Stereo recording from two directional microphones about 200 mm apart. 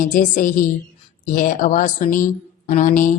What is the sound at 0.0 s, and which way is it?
Speech, 40° left (ahead or behind).